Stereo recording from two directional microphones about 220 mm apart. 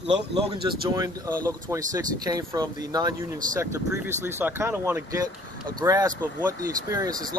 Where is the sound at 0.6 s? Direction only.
15° right (ahead or behind).